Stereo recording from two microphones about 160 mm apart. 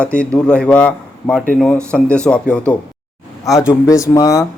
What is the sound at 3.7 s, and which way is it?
Speech, 20° left (ahead or behind).